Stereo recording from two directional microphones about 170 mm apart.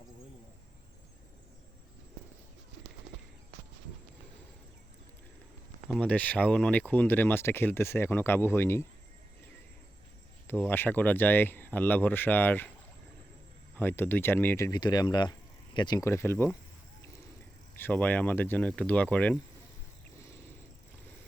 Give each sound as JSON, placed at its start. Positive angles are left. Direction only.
{"t": 5.9, "sound": "speech", "side_deg": 10}
{"t": 10.4, "sound": "speech", "side_deg": 10}
{"t": 13.7, "sound": "speech", "side_deg": 10}
{"t": 17.7, "sound": "speech", "side_deg": 10}